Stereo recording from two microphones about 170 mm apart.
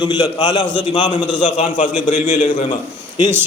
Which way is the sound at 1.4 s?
50° left (ahead or behind).